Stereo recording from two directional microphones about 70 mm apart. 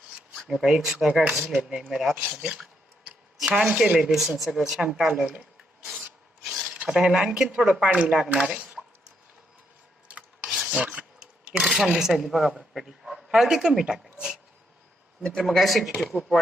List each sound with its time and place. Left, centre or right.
0.3 s speech: centre
5.4 s filing: centre
6.8 s speech: centre
10.1 s rub: centre
11.9 s speech: centre
15.2 s speech: centre